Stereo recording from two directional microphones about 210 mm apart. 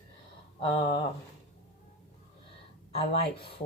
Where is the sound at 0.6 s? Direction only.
25° left (ahead or behind).